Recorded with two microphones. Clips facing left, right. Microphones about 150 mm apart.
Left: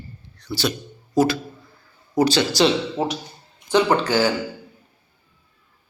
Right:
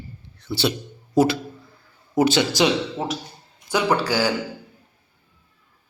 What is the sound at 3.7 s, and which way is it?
Speech, 10° right (ahead or behind).